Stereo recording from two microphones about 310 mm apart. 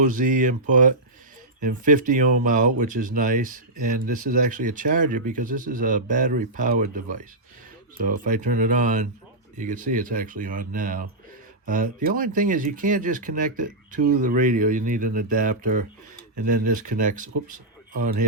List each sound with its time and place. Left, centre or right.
0.0 s speech: right